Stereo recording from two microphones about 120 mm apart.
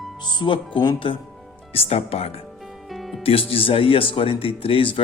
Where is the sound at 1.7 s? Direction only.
55° left (ahead or behind).